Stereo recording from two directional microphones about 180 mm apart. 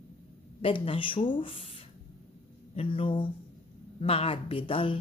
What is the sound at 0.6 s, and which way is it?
Speech, 30° left (ahead or behind).